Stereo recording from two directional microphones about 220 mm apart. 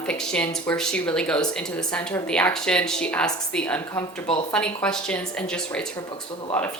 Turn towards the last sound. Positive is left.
turn(degrees=5)  # may be behind; listen again after turning